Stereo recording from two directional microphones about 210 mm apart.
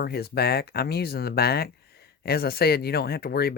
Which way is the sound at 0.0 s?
50° left (ahead or behind).